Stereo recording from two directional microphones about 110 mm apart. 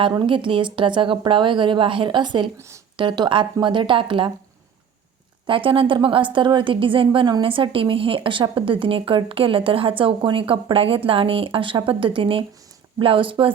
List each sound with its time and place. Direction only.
0.2 s speech: 50° right (ahead or behind)
2.6 s a woman's voice: 25° right (ahead or behind)
3.0 s speech: 50° right (ahead or behind)
5.5 s speech: 50° right (ahead or behind)